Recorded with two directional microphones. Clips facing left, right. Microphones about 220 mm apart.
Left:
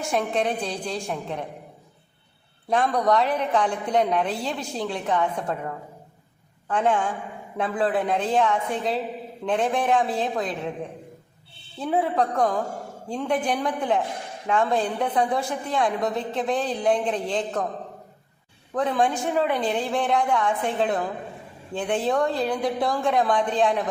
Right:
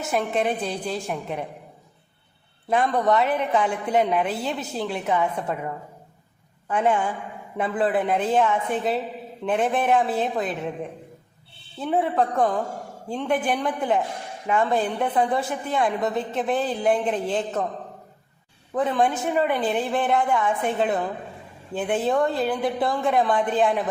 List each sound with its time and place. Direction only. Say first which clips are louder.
0.1 s a woman's voice: right 1 dB; 5° right (ahead or behind)
2.6 s a woman's voice: right 1 dB; 5° right (ahead or behind)
11.8 s a woman's voice: right 1 dB; centre (ahead or behind)
18.7 s a woman's voice: right 1 dB; 5° right (ahead or behind)